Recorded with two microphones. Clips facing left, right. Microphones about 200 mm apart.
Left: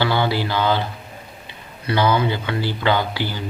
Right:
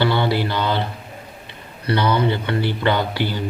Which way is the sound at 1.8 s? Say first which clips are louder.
Even; 60° right (ahead or behind).